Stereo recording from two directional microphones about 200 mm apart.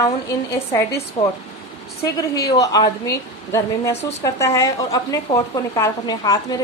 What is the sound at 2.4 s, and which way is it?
A woman's voice, 15° left (ahead or behind).